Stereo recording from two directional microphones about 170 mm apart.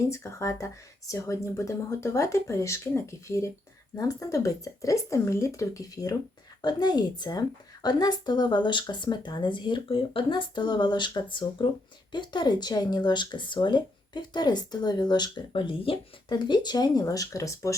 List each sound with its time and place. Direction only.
0.1 s speech: 15° left (ahead or behind)